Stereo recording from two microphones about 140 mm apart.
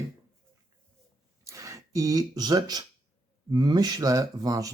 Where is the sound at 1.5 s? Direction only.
20° right (ahead or behind).